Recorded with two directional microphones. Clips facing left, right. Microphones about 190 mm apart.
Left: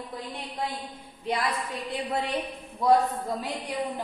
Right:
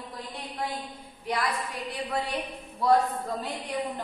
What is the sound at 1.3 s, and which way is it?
A man's voice, 25° left (ahead or behind).